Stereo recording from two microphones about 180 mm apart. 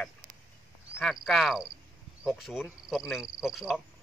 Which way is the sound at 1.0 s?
Centre (ahead or behind).